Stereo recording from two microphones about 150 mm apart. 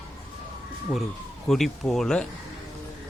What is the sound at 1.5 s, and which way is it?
Speech, centre (ahead or behind).